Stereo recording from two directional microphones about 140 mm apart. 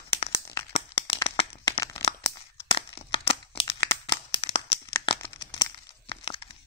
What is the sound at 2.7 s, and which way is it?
Crumpling, 40° left (ahead or behind).